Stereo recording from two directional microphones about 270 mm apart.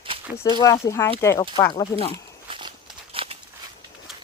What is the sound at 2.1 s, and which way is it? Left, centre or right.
Walk, centre.